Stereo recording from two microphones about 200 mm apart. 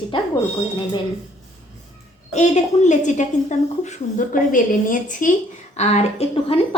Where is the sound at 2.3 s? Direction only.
35° left (ahead or behind).